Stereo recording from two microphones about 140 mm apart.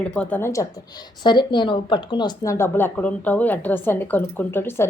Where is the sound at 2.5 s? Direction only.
15° left (ahead or behind).